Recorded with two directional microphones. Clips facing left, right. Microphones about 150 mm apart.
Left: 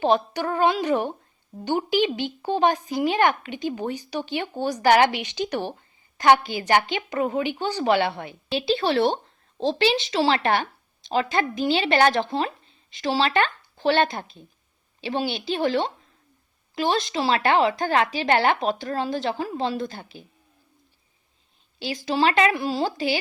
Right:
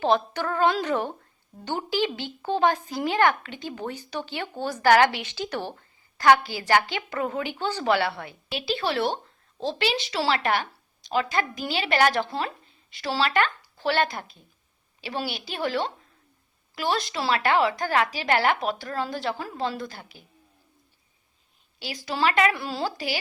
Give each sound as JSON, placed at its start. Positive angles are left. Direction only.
{"t": 0.0, "sound": "a woman's voice", "side_deg": 15}
{"t": 21.8, "sound": "a woman's voice", "side_deg": 25}
{"t": 22.5, "sound": "a woman's voice", "side_deg": 15}